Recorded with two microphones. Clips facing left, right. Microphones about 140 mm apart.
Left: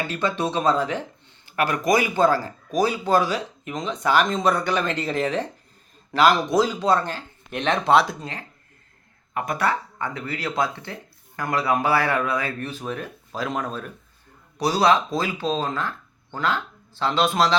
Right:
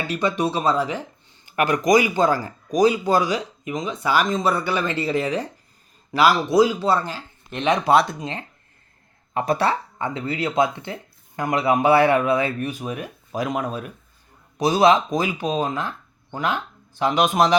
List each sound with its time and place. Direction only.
0.1 s speech: 15° right (ahead or behind)
2.1 s speech: 15° right (ahead or behind)
8.2 s speech: 25° right (ahead or behind)